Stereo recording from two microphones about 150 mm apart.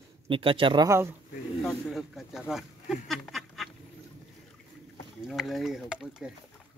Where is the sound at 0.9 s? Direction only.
15° right (ahead or behind).